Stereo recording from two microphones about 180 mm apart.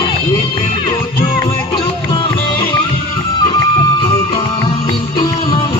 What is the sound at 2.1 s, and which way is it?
Music, 30° left (ahead or behind).